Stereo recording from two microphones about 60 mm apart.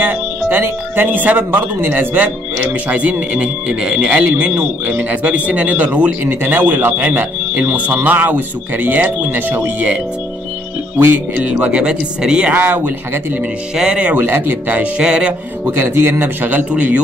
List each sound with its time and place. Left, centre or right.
0.0 s speech: right
11.3 s speech: centre
12.5 s speech: right
14.2 s speech: right
14.8 s speech: centre
15.8 s speech: right
16.4 s speech: right